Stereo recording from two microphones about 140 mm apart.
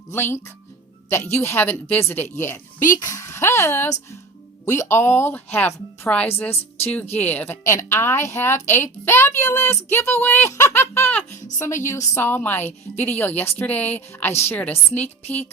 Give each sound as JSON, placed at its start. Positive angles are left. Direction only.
{"t": 0.1, "sound": "speech", "side_deg": 15}